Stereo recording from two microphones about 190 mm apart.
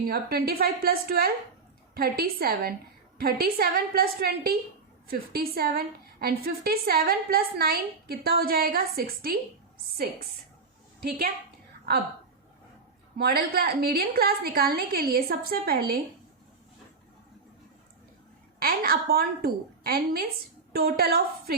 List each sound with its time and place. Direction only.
0.1 s a woman's voice: 55° right (ahead or behind)
13.1 s a woman's voice: 55° right (ahead or behind)
18.6 s a woman's voice: 50° right (ahead or behind)